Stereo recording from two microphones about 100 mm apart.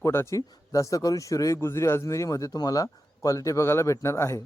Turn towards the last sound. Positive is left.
turn(degrees=25)  # may be behind; listen again after turning